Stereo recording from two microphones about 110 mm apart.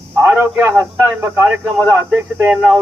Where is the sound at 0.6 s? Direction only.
20° right (ahead or behind).